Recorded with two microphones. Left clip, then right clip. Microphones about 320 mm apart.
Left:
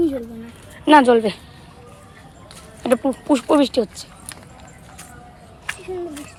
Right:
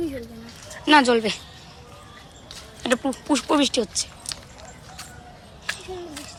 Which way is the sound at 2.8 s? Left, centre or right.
Centre.